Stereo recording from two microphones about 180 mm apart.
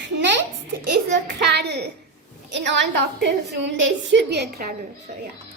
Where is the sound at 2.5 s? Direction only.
80° right; by 4.7 s 60° right (ahead or behind).